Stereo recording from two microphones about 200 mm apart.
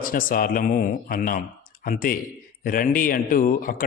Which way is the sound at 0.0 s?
45° left (ahead or behind).